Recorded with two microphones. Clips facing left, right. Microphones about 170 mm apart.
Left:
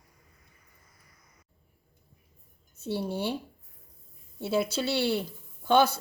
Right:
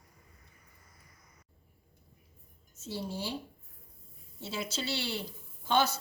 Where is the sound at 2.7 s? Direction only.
60° left (ahead or behind).